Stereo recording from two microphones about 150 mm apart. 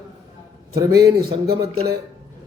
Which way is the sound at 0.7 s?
90° right.